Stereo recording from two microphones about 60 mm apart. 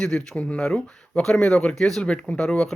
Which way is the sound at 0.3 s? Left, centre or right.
Centre.